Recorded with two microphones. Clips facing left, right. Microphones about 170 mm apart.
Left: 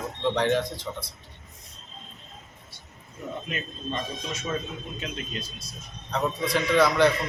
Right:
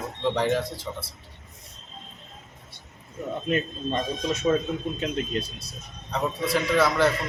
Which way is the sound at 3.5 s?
40° right (ahead or behind).